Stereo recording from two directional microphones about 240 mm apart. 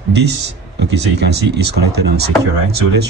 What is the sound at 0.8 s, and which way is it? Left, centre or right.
Speech, right.